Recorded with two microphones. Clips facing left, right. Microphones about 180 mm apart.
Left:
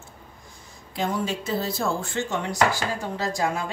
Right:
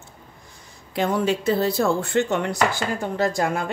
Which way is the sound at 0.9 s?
65° right (ahead or behind).